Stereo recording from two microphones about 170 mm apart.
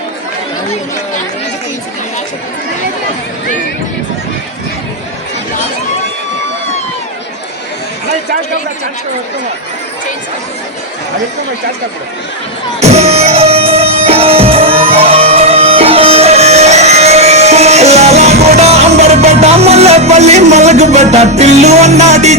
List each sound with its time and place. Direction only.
12.8 s music: 40° right (ahead or behind)